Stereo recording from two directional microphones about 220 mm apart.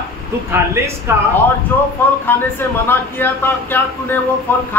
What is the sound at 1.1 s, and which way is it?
Speech, 10° right (ahead or behind).